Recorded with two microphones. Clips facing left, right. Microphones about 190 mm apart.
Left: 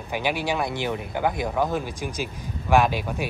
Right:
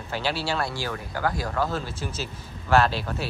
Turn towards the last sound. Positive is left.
turn(degrees=15)  # may be behind; listen again after turning